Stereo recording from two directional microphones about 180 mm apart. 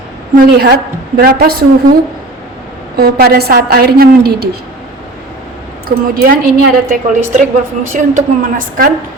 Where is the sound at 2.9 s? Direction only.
60° right (ahead or behind).